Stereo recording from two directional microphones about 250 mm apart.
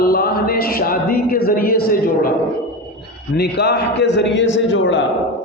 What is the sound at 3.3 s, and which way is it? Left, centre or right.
A man's voice, left.